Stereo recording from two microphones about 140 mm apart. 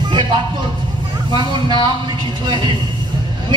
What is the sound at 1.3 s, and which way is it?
A man's voice, 30° right (ahead or behind).